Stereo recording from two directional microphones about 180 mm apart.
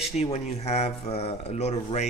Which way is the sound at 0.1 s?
35° left (ahead or behind).